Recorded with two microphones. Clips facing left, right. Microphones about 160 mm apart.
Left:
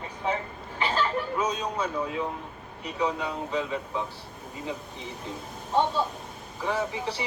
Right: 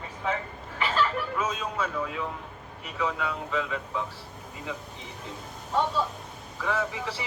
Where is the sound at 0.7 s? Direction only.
35° left (ahead or behind).